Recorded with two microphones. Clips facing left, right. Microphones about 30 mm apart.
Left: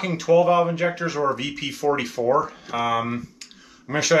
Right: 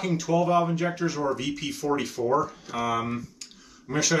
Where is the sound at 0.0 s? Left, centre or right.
Left.